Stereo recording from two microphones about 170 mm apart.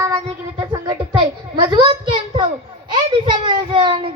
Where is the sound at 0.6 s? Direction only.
25° right (ahead or behind).